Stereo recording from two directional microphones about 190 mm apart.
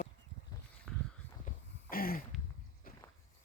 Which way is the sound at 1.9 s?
50° left (ahead or behind).